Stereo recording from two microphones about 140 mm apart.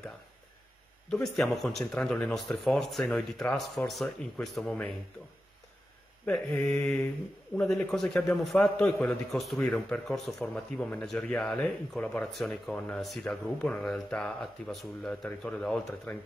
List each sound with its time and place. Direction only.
1.1 s a man's voice: 5° left (ahead or behind)
6.2 s mantra: 10° left (ahead or behind)
7.5 s a man's voice: 5° left (ahead or behind)